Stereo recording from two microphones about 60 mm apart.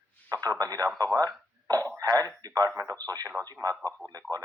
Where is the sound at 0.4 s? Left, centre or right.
Right.